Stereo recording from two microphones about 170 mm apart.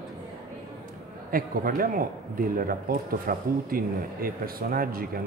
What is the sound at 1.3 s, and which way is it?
Speech, 55° right (ahead or behind).